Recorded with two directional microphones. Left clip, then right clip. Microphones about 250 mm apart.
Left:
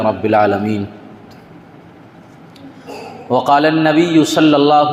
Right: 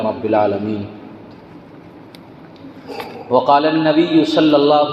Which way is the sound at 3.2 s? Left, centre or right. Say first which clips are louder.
Left 1 dB; left.